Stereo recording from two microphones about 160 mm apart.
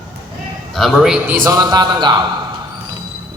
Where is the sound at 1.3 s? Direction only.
20° right (ahead or behind).